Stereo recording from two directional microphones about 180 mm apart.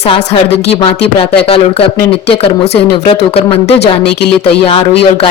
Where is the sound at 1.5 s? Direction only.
35° left (ahead or behind).